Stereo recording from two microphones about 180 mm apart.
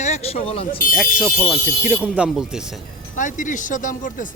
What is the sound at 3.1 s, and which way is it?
Speech, 45° left (ahead or behind).